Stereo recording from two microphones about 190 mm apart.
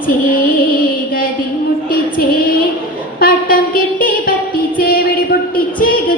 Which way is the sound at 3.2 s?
50° left (ahead or behind).